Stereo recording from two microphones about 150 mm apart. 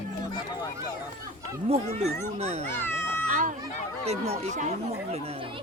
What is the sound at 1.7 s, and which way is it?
Speech, 45° right (ahead or behind).